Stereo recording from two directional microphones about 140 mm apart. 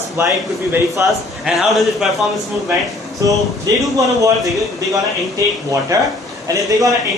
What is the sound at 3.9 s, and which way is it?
Speech, 25° right (ahead or behind).